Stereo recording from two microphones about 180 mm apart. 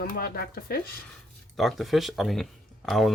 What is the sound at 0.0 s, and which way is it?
Speech, 55° left (ahead or behind).